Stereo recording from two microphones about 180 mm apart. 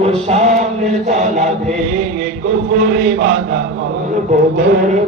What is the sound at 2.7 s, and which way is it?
Mantra, 55° right (ahead or behind).